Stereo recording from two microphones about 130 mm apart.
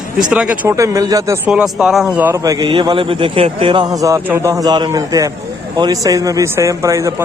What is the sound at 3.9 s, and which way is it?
A man's voice, 25° right (ahead or behind).